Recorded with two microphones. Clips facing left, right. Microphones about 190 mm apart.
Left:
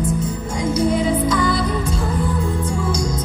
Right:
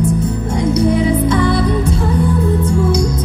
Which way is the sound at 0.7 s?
60° right (ahead or behind).